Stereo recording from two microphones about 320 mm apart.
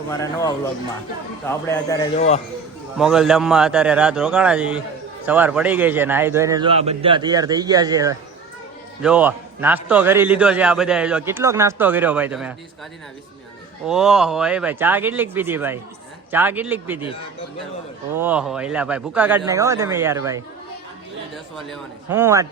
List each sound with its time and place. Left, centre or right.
0.1 s a man's voice: centre
2.1 s speech: left
3.0 s a man's voice: centre
13.8 s a man's voice: centre
18.1 s a man's voice: centre